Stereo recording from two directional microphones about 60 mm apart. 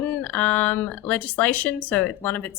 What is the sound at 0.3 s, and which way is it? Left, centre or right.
Speech, left.